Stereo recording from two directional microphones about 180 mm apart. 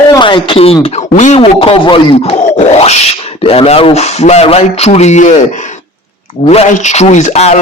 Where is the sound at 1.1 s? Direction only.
40° left (ahead or behind).